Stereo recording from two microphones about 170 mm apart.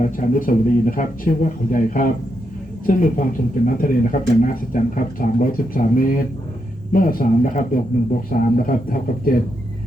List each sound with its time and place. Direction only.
0.0 s speech: 50° left (ahead or behind)